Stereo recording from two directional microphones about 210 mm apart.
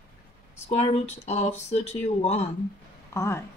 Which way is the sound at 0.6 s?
30° left (ahead or behind).